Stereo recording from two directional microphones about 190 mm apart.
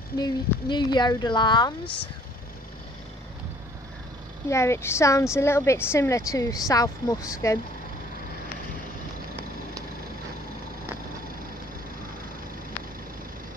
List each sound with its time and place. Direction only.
0.2 s speech: 25° left (ahead or behind)
4.5 s speech: 15° left (ahead or behind)